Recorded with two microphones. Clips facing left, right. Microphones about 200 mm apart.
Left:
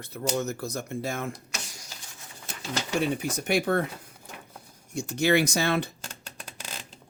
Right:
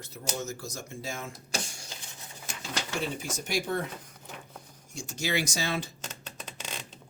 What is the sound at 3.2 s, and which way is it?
Speech, 60° left (ahead or behind).